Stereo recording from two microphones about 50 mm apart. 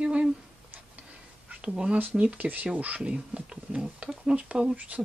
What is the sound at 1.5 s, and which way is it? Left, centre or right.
Speech, centre.